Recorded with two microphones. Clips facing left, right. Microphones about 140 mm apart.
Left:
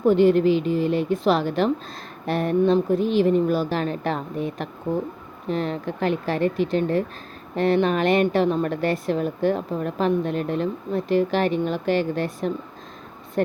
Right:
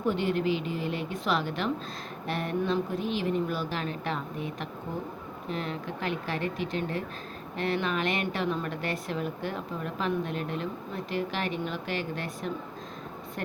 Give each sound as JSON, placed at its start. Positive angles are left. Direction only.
{"t": 0.0, "sound": "a woman's voice", "side_deg": 40}